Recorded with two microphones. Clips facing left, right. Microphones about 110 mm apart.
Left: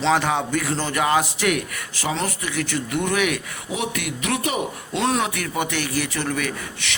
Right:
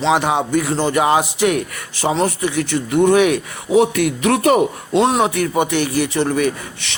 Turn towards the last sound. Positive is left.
turn(degrees=-30)  # may be behind; listen again after turning